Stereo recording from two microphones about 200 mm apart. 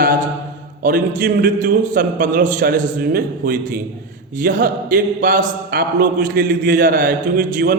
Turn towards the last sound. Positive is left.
turn(degrees=-45)  # may be behind; listen again after turning